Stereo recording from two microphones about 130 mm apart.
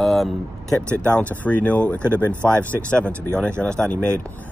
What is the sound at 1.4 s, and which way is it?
Speech, 10° left (ahead or behind).